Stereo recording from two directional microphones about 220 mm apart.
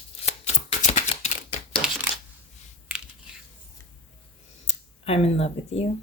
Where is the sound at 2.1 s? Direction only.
25° left (ahead or behind).